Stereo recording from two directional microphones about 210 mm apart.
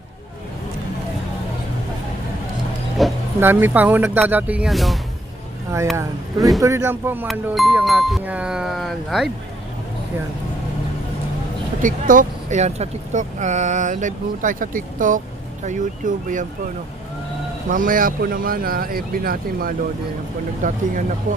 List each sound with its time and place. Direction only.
3.0 s speech: 10° right (ahead or behind)
6.6 s speech: 15° right (ahead or behind)
11.8 s speech: 40° right (ahead or behind)
17.7 s speech: 40° right (ahead or behind)